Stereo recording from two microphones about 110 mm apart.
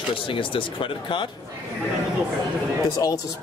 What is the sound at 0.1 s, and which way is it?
Speech, 50° left (ahead or behind).